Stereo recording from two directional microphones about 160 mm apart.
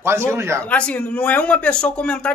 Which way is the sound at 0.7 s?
10° left (ahead or behind).